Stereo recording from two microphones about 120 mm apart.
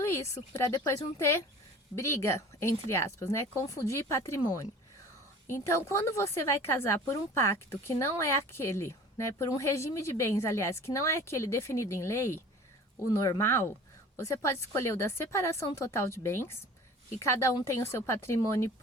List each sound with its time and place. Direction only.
0.0 s a woman's voice: 25° left (ahead or behind)
13.4 s a woman's voice: 20° left (ahead or behind)